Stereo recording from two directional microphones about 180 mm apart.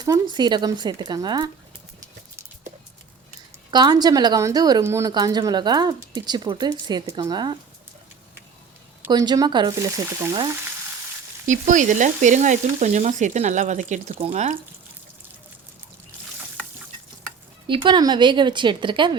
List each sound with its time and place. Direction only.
0.0 s a woman's voice: 25° right (ahead or behind)
3.7 s a woman's voice: 25° right (ahead or behind)
9.0 s a woman's voice: 25° right (ahead or behind)
11.4 s frying: 45° right (ahead or behind)
17.7 s a woman's voice: 25° right (ahead or behind)